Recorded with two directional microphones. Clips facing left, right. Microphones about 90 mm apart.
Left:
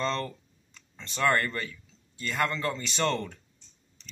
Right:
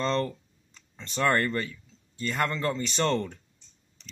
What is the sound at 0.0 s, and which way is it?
Speech, 30° right (ahead or behind).